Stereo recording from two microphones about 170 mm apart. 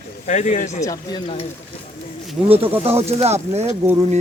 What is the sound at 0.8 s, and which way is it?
Speech, 30° left (ahead or behind).